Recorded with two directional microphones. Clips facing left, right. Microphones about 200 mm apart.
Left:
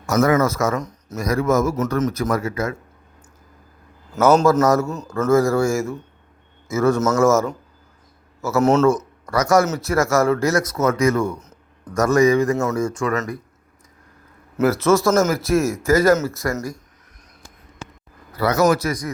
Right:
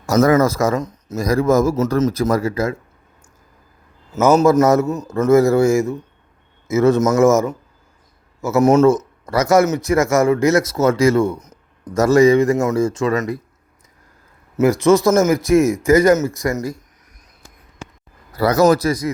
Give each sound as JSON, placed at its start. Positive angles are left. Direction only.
{"t": 0.0, "sound": "speech", "side_deg": -35}
{"t": 1.2, "sound": "speech", "side_deg": -35}
{"t": 4.1, "sound": "speech", "side_deg": -10}
{"t": 4.6, "sound": "speech", "side_deg": -20}
{"t": 8.9, "sound": "speech", "side_deg": -20}
{"t": 14.5, "sound": "speech", "side_deg": -15}
{"t": 18.3, "sound": "speech", "side_deg": -35}